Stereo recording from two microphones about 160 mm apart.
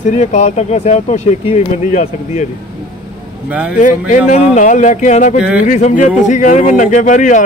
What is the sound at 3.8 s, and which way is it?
Speech, 55° left (ahead or behind).